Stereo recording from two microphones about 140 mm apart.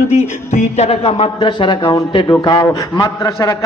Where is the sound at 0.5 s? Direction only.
50° left (ahead or behind).